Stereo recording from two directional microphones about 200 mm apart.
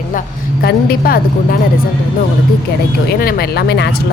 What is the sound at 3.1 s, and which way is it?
Speech, 50° left (ahead or behind).